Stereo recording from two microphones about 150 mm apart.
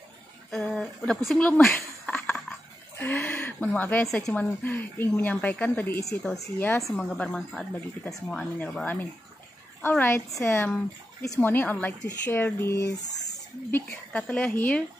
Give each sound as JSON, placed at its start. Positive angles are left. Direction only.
{"t": 0.5, "sound": "speech", "side_deg": 5}
{"t": 3.0, "sound": "a sound", "side_deg": 15}
{"t": 4.1, "sound": "speech", "side_deg": 10}
{"t": 7.0, "sound": "speech", "side_deg": 5}